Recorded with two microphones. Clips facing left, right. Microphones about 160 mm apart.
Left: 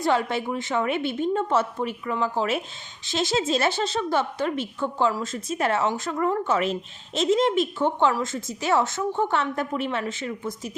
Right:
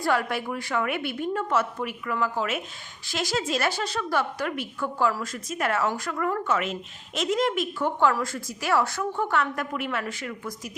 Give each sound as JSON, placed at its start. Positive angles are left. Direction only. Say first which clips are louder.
{"t": 0.0, "sound": "a woman's voice", "louder": "left 2 dB", "side_deg": 25}